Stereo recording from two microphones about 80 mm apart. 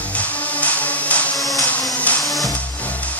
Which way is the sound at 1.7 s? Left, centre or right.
Centre.